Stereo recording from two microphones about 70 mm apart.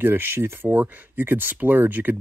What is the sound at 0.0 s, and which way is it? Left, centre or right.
Speech, right.